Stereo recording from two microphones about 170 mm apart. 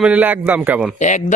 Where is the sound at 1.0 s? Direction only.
45° left (ahead or behind).